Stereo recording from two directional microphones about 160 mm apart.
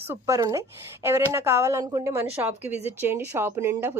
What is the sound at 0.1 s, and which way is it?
A woman's voice, 15° right (ahead or behind).